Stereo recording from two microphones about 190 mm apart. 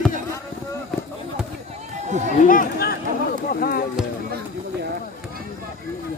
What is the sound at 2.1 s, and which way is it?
Speech, 40° right (ahead or behind).